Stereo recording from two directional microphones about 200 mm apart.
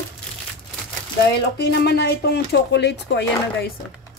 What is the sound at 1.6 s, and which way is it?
Speech, 55° left (ahead or behind).